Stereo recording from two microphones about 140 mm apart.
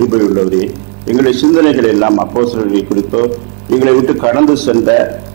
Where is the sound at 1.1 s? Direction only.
15° right (ahead or behind).